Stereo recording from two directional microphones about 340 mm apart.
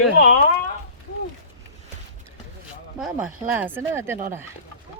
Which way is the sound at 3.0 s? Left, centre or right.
Centre.